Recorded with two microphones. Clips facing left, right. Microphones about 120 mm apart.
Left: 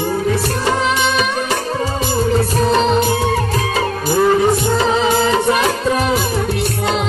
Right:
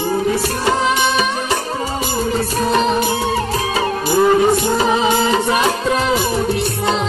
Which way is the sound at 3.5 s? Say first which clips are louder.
Even; 25° right (ahead or behind).